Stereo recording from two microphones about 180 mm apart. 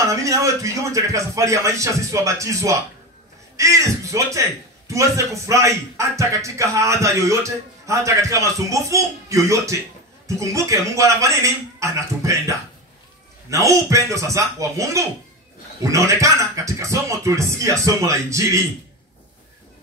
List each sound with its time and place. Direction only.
0.0 s a man's voice: 15° right (ahead or behind)